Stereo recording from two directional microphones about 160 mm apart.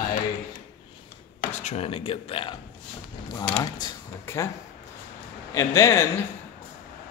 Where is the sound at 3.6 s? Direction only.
25° left (ahead or behind).